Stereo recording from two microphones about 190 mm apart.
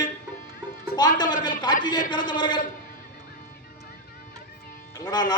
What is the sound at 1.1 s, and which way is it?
A man's voice, 20° left (ahead or behind).